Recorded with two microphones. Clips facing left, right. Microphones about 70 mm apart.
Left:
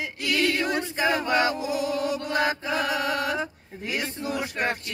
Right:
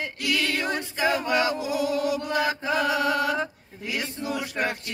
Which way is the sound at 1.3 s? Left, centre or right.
Left.